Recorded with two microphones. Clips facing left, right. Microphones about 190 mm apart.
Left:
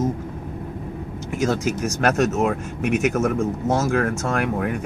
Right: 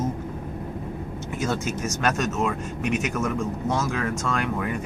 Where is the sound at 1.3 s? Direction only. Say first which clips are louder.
Left 5 dB; 90° left.